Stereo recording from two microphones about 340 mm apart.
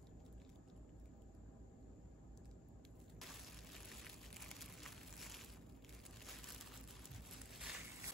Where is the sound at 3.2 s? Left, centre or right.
Centre.